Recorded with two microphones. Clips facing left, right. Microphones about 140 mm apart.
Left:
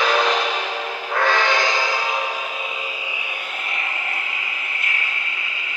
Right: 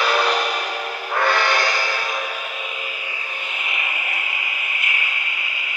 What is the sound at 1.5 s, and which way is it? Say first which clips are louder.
Music: left 1 dB; 90° left.